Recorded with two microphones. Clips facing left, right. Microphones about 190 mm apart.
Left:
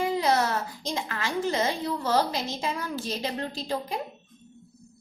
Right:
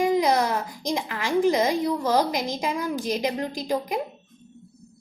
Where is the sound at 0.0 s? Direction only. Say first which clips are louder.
Right 4 dB; 15° right (ahead or behind).